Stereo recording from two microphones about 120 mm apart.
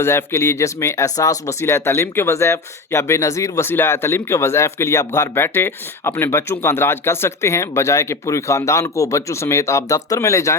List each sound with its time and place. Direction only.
0.0 s speech: 20° left (ahead or behind)